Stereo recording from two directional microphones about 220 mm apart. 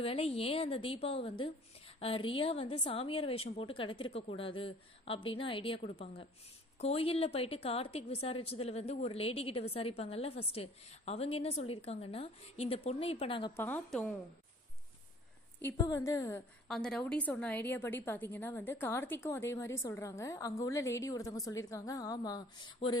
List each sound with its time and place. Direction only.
0.0 s a woman's voice: 25° left (ahead or behind)
13.6 s a woman's voice: 10° left (ahead or behind)
15.6 s a woman's voice: 15° left (ahead or behind)
16.6 s a woman's voice: 5° left (ahead or behind); by 22.9 s 20° left (ahead or behind)